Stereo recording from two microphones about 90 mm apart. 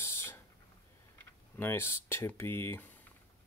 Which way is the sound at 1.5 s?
25° left (ahead or behind).